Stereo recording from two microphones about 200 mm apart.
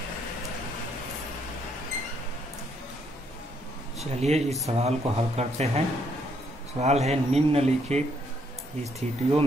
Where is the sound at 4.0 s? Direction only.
35° right (ahead or behind).